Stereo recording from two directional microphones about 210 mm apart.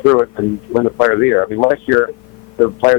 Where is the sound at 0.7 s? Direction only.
20° left (ahead or behind).